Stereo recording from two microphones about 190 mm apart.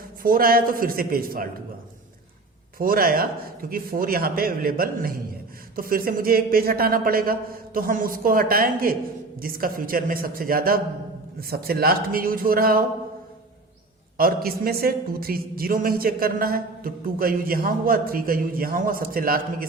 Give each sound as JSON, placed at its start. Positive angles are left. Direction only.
{"t": 0.2, "sound": "a man's voice", "side_deg": -50}
{"t": 2.7, "sound": "a man's voice", "side_deg": -50}
{"t": 14.2, "sound": "a man's voice", "side_deg": -50}